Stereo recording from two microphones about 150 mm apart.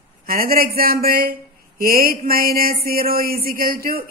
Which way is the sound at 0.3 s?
75° right (ahead or behind).